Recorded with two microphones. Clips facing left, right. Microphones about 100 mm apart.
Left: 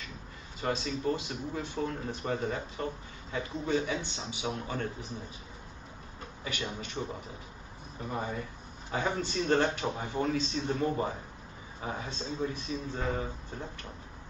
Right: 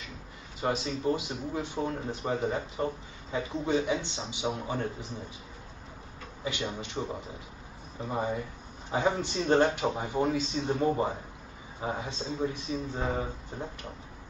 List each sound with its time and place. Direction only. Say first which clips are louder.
0.6 s speech: right 2 dB; 20° right (ahead or behind)
6.4 s a man's voice: right 4 dB; 20° right (ahead or behind)
8.1 s a man's voice: right 4 dB; 15° right (ahead or behind)